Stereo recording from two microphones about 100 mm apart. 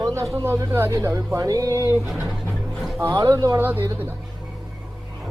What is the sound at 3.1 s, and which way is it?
Speech, 35° right (ahead or behind).